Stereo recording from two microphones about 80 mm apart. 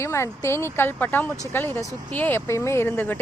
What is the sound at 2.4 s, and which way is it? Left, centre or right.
Speech, left.